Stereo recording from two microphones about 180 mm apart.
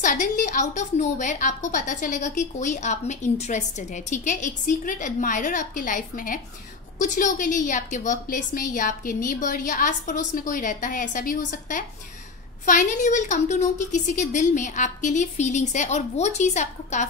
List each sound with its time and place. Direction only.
0.0 s a woman's voice: 45° left (ahead or behind)